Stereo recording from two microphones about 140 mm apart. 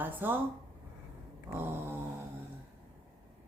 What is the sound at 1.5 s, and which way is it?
Speech, 15° right (ahead or behind).